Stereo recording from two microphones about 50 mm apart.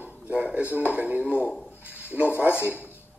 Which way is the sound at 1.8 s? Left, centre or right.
Right.